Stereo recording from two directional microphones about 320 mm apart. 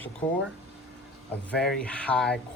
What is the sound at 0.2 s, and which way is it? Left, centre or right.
Speech, centre.